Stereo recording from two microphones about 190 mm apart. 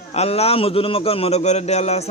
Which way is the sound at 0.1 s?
35° left (ahead or behind).